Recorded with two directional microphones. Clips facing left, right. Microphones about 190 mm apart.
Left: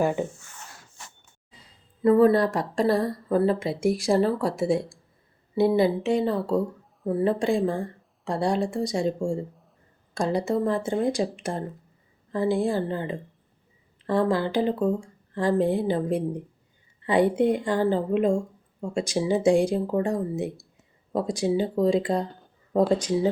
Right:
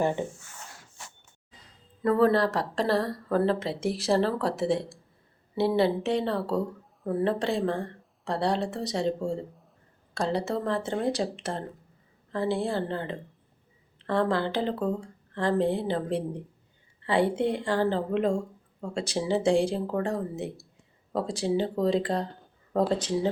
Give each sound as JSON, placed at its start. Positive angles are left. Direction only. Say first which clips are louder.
{"t": 0.0, "sound": "a woman's voice", "louder": "left 3 dB", "side_deg": 10}
{"t": 2.0, "sound": "a woman's voice", "louder": "left 4 dB", "side_deg": 15}